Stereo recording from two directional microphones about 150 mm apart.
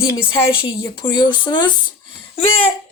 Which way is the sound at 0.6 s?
30° left (ahead or behind).